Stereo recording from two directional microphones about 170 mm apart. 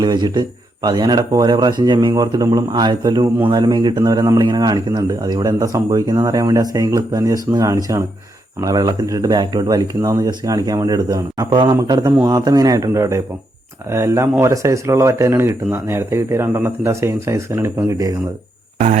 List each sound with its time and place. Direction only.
0.0 s speech: 25° right (ahead or behind)